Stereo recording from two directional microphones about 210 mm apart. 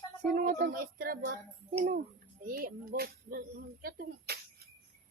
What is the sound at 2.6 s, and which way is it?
A woman's voice, 45° right (ahead or behind).